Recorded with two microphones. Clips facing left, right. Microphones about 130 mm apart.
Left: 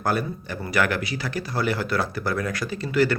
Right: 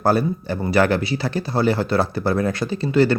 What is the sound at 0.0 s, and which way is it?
Speech, 30° right (ahead or behind).